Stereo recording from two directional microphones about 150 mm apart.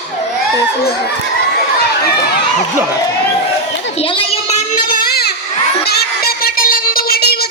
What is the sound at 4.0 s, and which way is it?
Children playing, 40° left (ahead or behind).